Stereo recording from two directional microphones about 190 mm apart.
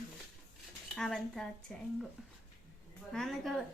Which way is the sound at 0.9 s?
5° left (ahead or behind).